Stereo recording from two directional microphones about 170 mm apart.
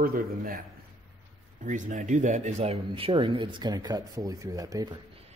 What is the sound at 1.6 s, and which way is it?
Speech, 50° right (ahead or behind).